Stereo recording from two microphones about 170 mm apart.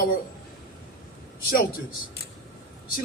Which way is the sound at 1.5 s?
60° left (ahead or behind).